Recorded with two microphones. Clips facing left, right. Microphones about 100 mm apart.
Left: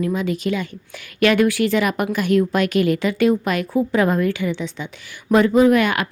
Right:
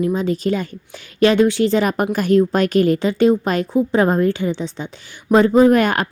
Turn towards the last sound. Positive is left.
turn(degrees=-40)  # may be behind; listen again after turning